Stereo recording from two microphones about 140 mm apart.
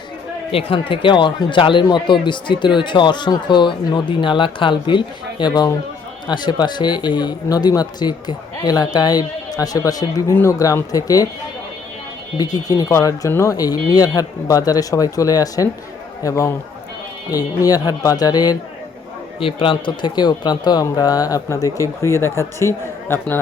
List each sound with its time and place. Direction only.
0.5 s speech: 40° left (ahead or behind); by 11.3 s 25° left (ahead or behind)
12.4 s speech: 25° left (ahead or behind)
19.4 s speech: 40° left (ahead or behind); by 23.4 s 15° left (ahead or behind)